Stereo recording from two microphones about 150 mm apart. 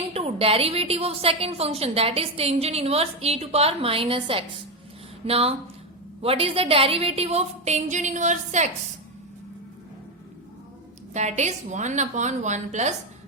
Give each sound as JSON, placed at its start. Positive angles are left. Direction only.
{"t": 0.1, "sound": "a woman's voice", "side_deg": -40}
{"t": 11.1, "sound": "a woman's voice", "side_deg": -50}